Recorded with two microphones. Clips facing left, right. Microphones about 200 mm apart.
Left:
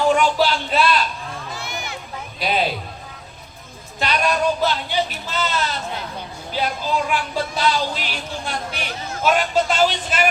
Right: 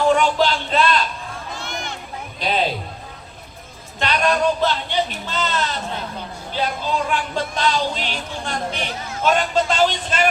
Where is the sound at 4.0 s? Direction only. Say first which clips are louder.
Right 1 dB; 10° left (ahead or behind).